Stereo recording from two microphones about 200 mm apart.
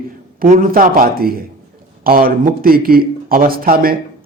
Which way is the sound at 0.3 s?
45° right (ahead or behind).